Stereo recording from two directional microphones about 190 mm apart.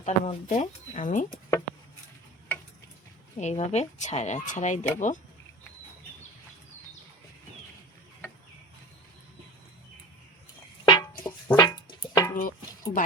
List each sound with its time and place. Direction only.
0.0 s speech: 40° left (ahead or behind)
1.3 s a sound: 15° left (ahead or behind)
3.3 s speech: 35° left (ahead or behind)
11.2 s music: 15° left (ahead or behind)
12.4 s music: 45° left (ahead or behind)